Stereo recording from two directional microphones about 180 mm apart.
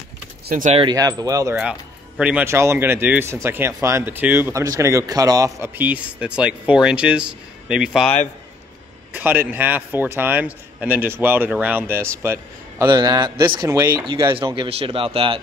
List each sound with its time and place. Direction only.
0.5 s speech: 45° right (ahead or behind)
0.7 s speech: 20° right (ahead or behind)
1.6 s speech: 5° right (ahead or behind)
9.1 s speech: 10° right (ahead or behind)
14.1 s speech: 30° right (ahead or behind)